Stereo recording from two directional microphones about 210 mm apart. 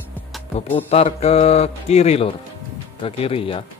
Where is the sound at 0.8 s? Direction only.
30° left (ahead or behind).